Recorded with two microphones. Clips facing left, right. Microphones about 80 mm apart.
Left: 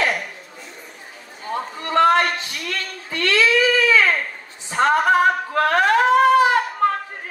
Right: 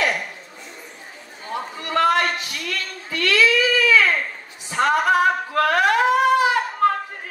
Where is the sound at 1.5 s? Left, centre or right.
Left.